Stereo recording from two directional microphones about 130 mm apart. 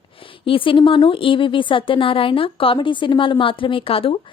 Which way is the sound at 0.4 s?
40° left (ahead or behind).